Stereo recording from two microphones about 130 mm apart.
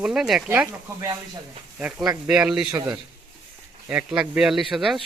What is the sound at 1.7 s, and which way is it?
Speech, 5° right (ahead or behind).